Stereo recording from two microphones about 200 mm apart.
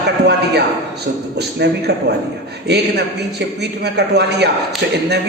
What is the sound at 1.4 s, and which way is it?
A man's voice, 55° right (ahead or behind).